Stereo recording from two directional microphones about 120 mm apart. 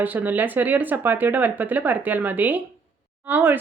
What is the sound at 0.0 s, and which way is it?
Speech, 15° right (ahead or behind).